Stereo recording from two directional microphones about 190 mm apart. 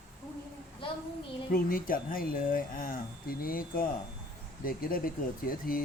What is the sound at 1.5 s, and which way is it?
Speech, 50° left (ahead or behind).